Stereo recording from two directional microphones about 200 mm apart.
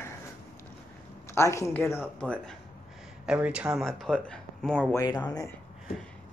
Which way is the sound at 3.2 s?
5° right (ahead or behind).